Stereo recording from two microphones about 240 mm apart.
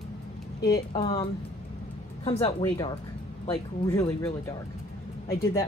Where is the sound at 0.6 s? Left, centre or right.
Centre.